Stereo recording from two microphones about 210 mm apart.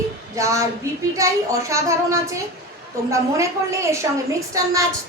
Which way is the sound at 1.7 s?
15° right (ahead or behind).